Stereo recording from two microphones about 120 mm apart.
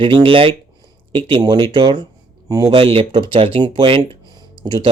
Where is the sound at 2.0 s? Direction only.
30° right (ahead or behind).